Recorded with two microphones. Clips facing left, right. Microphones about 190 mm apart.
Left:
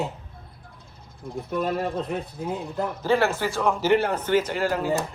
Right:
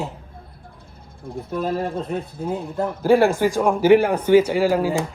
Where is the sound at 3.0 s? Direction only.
10° right (ahead or behind).